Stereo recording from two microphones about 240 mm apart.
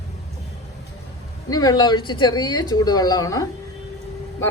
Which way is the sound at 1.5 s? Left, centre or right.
Centre.